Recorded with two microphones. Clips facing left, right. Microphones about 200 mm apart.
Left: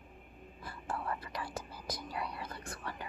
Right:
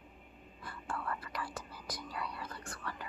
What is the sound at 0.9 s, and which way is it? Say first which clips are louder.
Whispering: left 1 dB; 25° left (ahead or behind).